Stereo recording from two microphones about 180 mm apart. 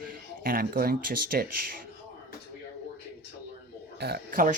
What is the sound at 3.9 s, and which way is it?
Speech, 60° right (ahead or behind).